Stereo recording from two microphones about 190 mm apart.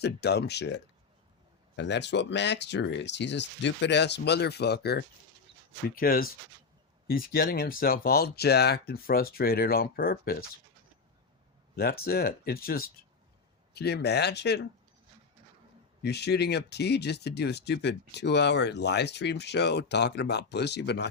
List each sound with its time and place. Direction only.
0.0 s speech: 60° left (ahead or behind)
11.8 s speech: 50° left (ahead or behind)
16.0 s speech: 60° left (ahead or behind)